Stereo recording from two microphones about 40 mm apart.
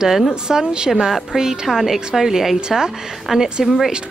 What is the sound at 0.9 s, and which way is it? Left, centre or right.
A woman's voice, centre.